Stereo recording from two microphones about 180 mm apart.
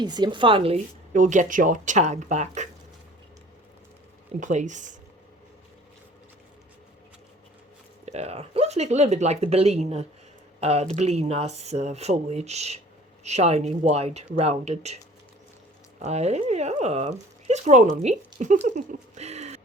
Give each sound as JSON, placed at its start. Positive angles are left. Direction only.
{"t": 0.0, "sound": "speech", "side_deg": -25}
{"t": 1.1, "sound": "speech", "side_deg": -45}
{"t": 4.4, "sound": "speech", "side_deg": -45}
{"t": 8.0, "sound": "speech", "side_deg": -35}
{"t": 16.0, "sound": "speech", "side_deg": -35}